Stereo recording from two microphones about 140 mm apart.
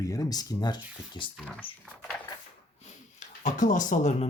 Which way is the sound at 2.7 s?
60° left (ahead or behind).